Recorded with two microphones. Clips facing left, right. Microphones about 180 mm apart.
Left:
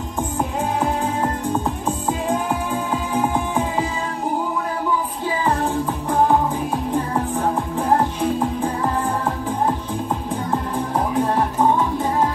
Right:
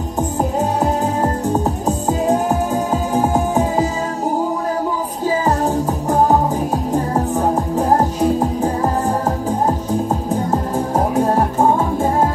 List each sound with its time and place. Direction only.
0.4 s music: 40° right (ahead or behind)
5.4 s music: 40° right (ahead or behind)
10.3 s music: 45° right (ahead or behind)